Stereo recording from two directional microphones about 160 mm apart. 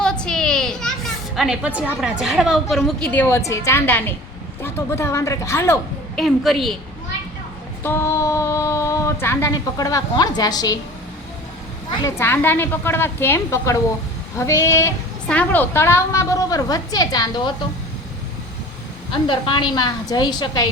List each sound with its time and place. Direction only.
0.0 s a child's voice: 5° left (ahead or behind)
6.1 s a woman's voice: centre (ahead or behind)
7.9 s speech: 15° left (ahead or behind)
11.9 s a woman's voice: 15° left (ahead or behind)
19.1 s speech: 30° left (ahead or behind)